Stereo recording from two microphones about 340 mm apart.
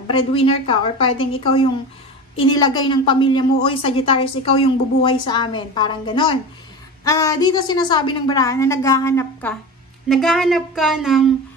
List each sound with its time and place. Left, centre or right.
0.3 s a woman's voice: centre